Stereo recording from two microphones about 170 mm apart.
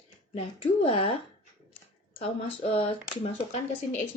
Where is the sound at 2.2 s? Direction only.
35° left (ahead or behind).